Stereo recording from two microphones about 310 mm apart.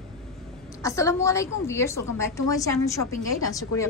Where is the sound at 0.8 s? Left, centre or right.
Centre.